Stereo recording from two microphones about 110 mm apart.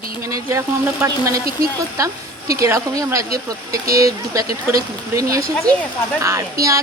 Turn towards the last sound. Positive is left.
turn(degrees=-30)  # may be behind; listen again after turning